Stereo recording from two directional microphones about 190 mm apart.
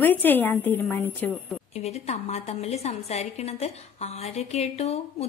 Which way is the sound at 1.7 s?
35° left (ahead or behind).